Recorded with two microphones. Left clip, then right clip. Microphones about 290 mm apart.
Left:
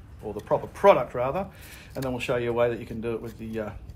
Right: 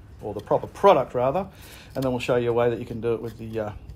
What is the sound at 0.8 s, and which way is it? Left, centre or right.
Speech, centre.